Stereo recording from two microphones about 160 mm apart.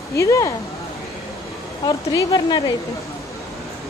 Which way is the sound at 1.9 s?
25° left (ahead or behind).